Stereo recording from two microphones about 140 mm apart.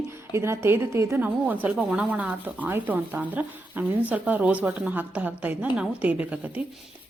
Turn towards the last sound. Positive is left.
turn(degrees=-10)  # may be behind; listen again after turning